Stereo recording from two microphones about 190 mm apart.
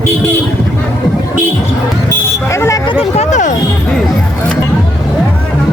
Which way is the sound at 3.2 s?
40° left (ahead or behind).